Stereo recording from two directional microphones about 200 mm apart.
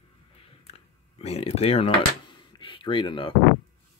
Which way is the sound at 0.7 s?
30° left (ahead or behind).